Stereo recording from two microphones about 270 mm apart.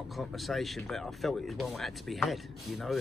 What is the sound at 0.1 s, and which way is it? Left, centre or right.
Speech, centre.